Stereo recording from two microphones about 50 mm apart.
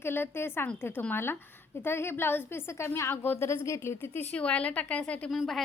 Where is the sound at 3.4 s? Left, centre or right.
Left.